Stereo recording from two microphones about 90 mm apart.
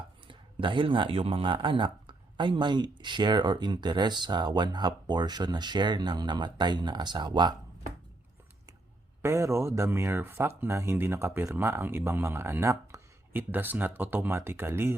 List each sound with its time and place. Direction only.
0.3 s speech: 70° right (ahead or behind); by 7.5 s 55° right (ahead or behind)
9.2 s speech: 30° right (ahead or behind)
13.5 s speech: 20° right (ahead or behind)